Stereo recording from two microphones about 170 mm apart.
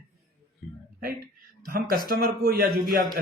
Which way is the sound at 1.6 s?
60° right (ahead or behind).